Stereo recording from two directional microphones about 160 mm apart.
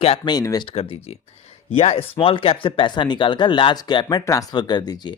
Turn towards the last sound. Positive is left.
turn(degrees=25)  # may be behind; listen again after turning